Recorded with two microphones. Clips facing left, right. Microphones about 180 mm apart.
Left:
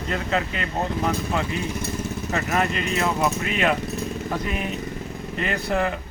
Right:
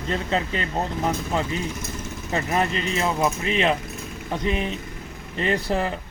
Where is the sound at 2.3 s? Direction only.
30° right (ahead or behind).